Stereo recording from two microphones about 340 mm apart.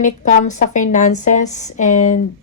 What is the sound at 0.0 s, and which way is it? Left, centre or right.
Speech, left.